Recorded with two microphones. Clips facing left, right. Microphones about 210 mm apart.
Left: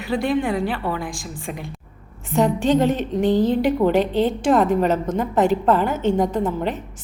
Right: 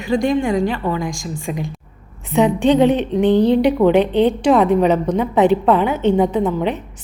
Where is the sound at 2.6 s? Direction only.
45° left (ahead or behind).